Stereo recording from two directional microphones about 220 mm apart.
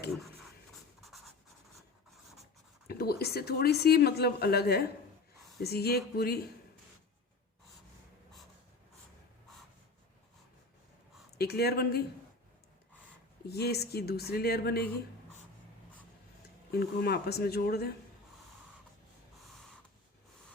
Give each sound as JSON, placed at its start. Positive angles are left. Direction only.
{"t": 0.7, "sound": "writing", "side_deg": 0}
{"t": 2.8, "sound": "speech", "side_deg": 45}
{"t": 11.3, "sound": "speech", "side_deg": 45}
{"t": 13.5, "sound": "speech", "side_deg": 45}
{"t": 16.7, "sound": "speech", "side_deg": 45}